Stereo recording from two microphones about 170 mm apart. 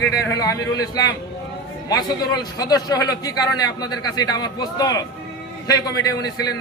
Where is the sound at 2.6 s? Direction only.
20° left (ahead or behind).